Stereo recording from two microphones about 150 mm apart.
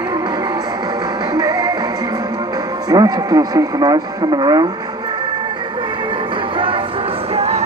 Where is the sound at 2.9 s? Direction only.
25° right (ahead or behind).